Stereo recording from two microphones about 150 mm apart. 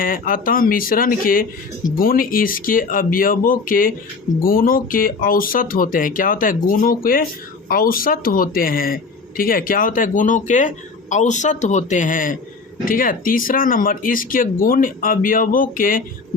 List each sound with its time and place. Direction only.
0.0 s speech: 70° left (ahead or behind)